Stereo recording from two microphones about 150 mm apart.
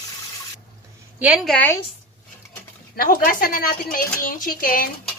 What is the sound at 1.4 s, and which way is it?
Speech, 10° left (ahead or behind).